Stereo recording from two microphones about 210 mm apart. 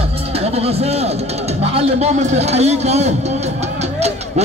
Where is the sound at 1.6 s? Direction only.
30° right (ahead or behind).